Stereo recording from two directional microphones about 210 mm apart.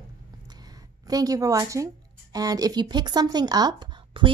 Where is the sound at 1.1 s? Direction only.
15° right (ahead or behind).